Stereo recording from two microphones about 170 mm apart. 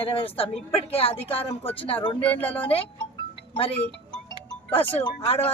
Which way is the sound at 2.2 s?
10° left (ahead or behind).